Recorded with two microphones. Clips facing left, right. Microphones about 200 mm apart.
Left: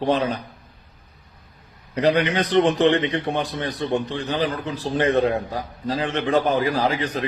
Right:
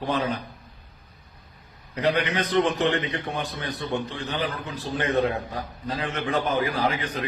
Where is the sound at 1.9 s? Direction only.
30° left (ahead or behind).